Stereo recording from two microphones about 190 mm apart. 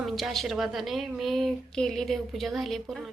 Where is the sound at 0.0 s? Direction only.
Centre (ahead or behind).